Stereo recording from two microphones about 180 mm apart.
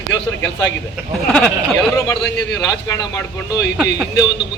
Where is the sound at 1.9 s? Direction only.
15° left (ahead or behind).